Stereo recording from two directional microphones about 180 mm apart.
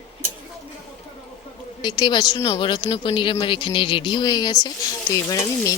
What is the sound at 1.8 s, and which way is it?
Speech, 25° left (ahead or behind).